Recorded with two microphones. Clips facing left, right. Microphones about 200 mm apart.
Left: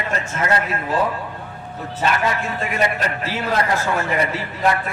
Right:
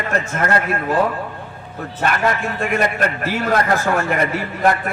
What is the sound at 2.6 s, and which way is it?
A man's voice, 50° right (ahead or behind).